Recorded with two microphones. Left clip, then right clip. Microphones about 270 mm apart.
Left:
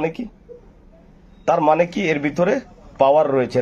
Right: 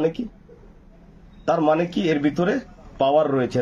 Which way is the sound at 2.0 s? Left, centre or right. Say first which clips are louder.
Left 3 dB; centre.